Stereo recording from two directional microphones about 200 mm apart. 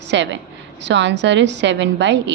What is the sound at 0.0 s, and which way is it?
A woman's voice, 60° right (ahead or behind).